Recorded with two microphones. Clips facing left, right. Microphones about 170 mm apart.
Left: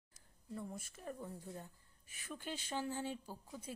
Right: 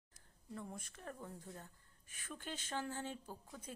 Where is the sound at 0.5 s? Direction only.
10° left (ahead or behind).